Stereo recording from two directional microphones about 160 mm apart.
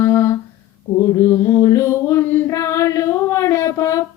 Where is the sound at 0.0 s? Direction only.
15° left (ahead or behind).